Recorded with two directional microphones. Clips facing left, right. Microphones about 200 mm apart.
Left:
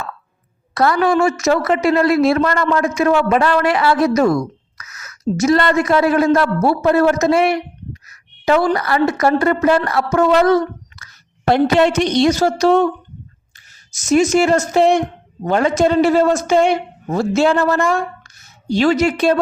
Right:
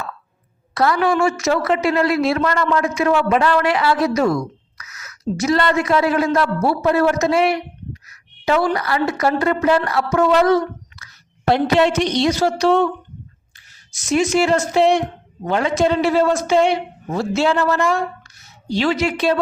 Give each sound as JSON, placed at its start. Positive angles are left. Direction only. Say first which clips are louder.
{"t": 0.7, "sound": "a woman's voice", "louder": "left 2 dB", "side_deg": 45}
{"t": 13.9, "sound": "a woman's voice", "louder": "left 4 dB", "side_deg": 45}